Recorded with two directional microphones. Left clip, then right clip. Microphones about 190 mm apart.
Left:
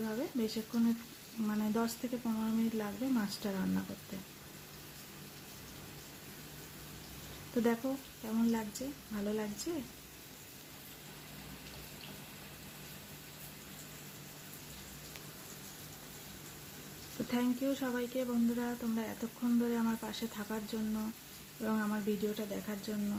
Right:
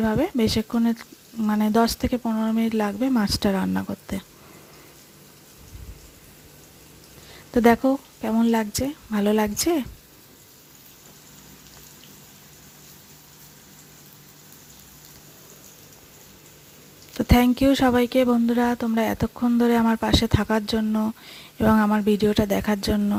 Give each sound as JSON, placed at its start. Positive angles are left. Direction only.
{"t": 0.0, "sound": "speech", "side_deg": -50}
{"t": 7.5, "sound": "speech", "side_deg": -55}
{"t": 17.3, "sound": "speech", "side_deg": -55}